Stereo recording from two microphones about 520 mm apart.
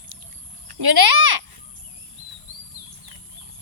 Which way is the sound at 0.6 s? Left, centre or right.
Right.